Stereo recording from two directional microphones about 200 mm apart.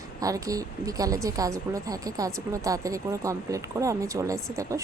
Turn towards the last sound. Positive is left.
turn(degrees=-15)  # may be behind; listen again after turning